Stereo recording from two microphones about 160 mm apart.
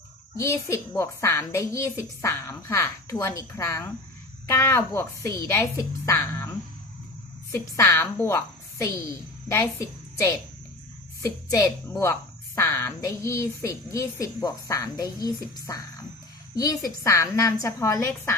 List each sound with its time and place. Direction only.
0.3 s a woman's voice: 20° left (ahead or behind)
7.5 s a woman's voice: 15° left (ahead or behind)
9.5 s a woman's voice: 20° left (ahead or behind)